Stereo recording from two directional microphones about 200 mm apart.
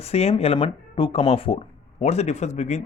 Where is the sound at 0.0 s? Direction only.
30° left (ahead or behind).